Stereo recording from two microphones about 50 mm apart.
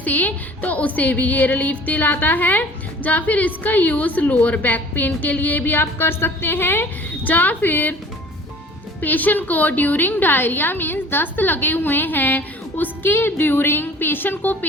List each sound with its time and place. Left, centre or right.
0.0 s speech: left
7.3 s speech: left
9.0 s speech: left